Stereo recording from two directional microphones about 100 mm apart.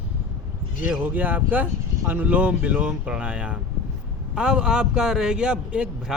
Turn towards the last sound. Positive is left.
turn(degrees=-10)  # may be behind; listen again after turning